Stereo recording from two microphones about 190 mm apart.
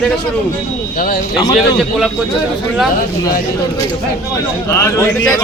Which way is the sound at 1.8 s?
Centre (ahead or behind).